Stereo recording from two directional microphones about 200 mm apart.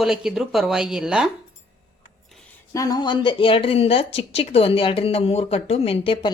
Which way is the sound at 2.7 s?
20° left (ahead or behind).